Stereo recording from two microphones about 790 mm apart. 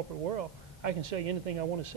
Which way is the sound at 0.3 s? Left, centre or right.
Right.